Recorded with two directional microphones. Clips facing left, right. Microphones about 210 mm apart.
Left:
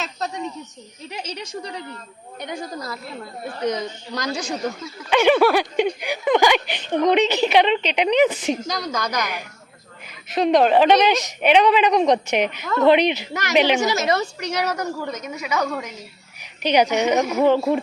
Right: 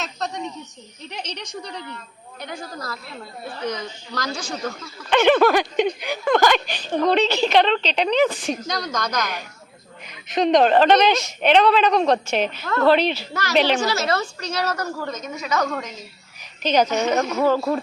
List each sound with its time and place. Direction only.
0.2 s a sound: 5° left (ahead or behind)
1.1 s speech: 5° left (ahead or behind)
2.4 s a woman's voice: 20° left (ahead or behind)
8.6 s speech: 5° left (ahead or behind); by 17.7 s 20° left (ahead or behind)